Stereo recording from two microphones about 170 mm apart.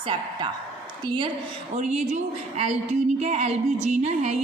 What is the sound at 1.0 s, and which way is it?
Speech, 25° right (ahead or behind).